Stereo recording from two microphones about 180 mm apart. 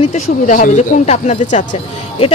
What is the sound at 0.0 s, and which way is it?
Speech, 40° left (ahead or behind).